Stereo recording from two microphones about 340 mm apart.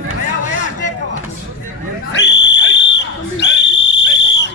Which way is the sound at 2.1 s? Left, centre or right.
Left.